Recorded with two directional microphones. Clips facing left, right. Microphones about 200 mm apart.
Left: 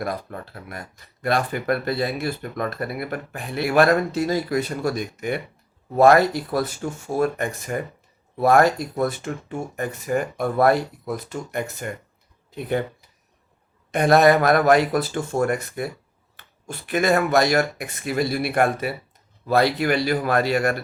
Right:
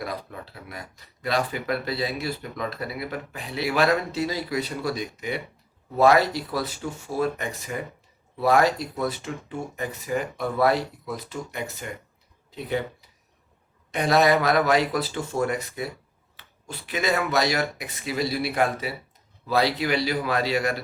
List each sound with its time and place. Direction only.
0.0 s speech: 50° left (ahead or behind)